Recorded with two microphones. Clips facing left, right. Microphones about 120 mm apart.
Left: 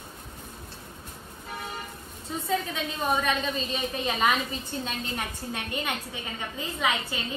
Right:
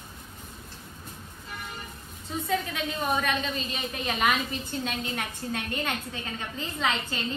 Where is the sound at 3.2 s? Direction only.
25° left (ahead or behind).